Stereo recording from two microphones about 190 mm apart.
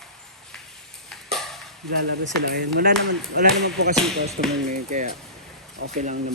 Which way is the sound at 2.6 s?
50° right (ahead or behind).